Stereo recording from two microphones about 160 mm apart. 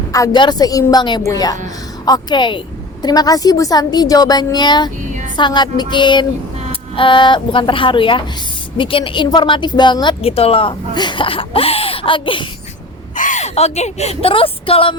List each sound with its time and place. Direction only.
0.1 s a woman's voice: 25° left (ahead or behind)
13.1 s a woman's voice: 50° left (ahead or behind); by 14.9 s 35° left (ahead or behind)